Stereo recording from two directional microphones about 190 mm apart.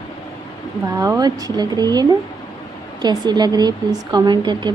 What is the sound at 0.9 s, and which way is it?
A woman's voice, 20° right (ahead or behind).